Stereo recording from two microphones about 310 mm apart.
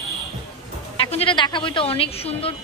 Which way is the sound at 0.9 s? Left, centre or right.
Centre.